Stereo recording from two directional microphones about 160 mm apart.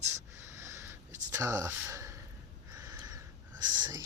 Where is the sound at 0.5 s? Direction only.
20° right (ahead or behind).